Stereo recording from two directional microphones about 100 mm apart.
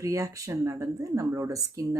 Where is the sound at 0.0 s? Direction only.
30° right (ahead or behind).